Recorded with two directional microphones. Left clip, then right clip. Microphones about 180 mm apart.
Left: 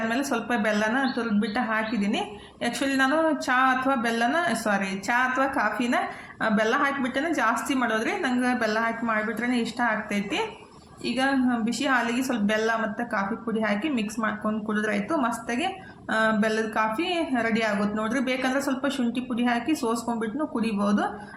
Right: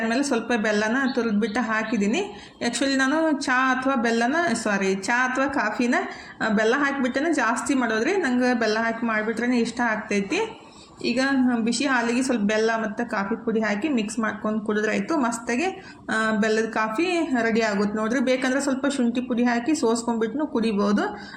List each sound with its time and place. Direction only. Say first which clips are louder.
0.1 s a woman's voice: right 3 dB; 15° right (ahead or behind)